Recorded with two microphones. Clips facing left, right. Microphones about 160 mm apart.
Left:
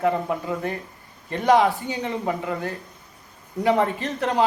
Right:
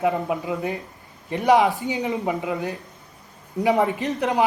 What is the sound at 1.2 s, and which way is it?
Speech, 15° right (ahead or behind).